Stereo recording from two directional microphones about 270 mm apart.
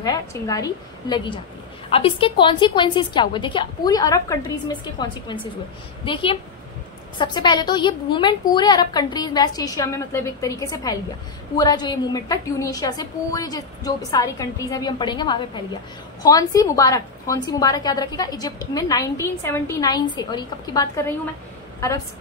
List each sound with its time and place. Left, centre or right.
0.0 s a woman's voice: centre